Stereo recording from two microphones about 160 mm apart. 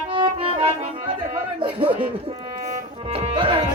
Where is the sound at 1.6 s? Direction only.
35° right (ahead or behind).